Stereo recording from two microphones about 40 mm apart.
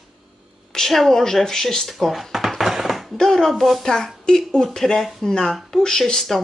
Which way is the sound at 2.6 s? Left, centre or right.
Centre.